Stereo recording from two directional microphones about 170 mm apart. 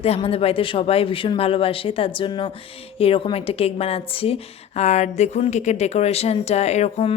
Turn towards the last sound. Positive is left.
turn(degrees=40)  # may be behind; listen again after turning